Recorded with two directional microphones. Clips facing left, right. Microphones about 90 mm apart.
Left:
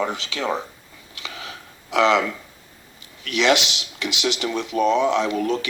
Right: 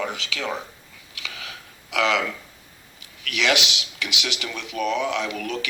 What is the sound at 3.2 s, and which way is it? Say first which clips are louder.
Speech: left 4 dB; 35° left (ahead or behind).